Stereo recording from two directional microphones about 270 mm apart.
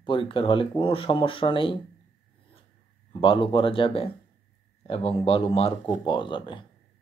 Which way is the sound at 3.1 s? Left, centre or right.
Centre.